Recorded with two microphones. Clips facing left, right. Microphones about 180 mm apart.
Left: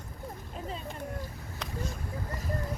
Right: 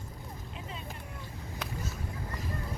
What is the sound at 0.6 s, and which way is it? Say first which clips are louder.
Vehicle: left 6 dB; 40° left (ahead or behind).